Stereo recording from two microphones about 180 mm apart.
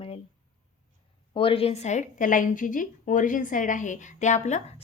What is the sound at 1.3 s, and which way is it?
A woman's voice, 30° left (ahead or behind).